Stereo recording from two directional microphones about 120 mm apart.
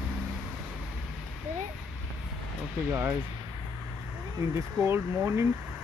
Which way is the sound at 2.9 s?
20° right (ahead or behind).